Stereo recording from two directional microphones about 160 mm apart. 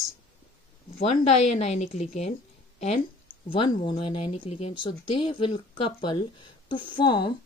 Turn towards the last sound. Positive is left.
turn(degrees=30)  # may be behind; listen again after turning